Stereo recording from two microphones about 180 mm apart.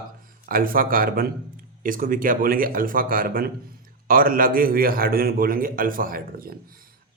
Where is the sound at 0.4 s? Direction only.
55° right (ahead or behind).